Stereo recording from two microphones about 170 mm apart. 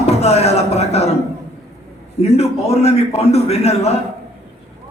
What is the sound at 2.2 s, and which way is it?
A man's voice, 40° left (ahead or behind).